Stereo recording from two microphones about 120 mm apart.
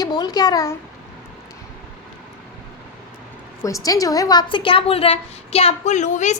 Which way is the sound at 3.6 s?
30° left (ahead or behind).